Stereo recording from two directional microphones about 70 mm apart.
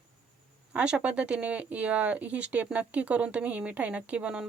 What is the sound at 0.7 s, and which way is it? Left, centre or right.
A woman's voice, centre.